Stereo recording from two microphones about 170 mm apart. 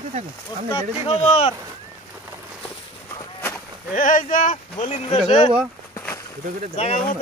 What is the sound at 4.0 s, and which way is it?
Speech, 50° left (ahead or behind).